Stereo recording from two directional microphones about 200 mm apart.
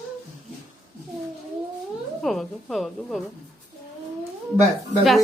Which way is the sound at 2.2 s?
Centre (ahead or behind).